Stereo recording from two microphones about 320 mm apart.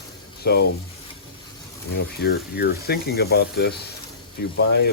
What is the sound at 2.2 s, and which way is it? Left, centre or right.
Speech, left.